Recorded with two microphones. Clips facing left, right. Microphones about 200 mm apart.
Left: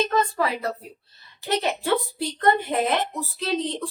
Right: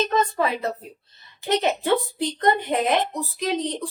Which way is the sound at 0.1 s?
20° right (ahead or behind).